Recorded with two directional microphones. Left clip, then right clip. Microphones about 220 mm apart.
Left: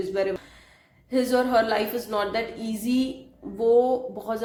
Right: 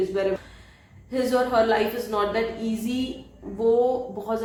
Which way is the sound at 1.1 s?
50° left (ahead or behind).